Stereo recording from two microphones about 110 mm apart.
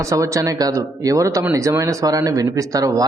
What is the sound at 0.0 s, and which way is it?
A man's voice, 30° right (ahead or behind).